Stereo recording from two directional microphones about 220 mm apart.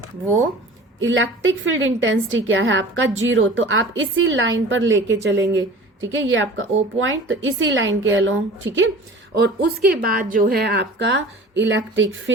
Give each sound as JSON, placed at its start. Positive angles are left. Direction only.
{"t": 0.9, "sound": "a woman's voice", "side_deg": -60}
{"t": 9.3, "sound": "a woman's voice", "side_deg": -45}